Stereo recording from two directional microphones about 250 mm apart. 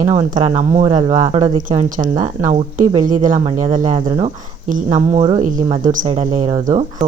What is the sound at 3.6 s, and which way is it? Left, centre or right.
Speech, right.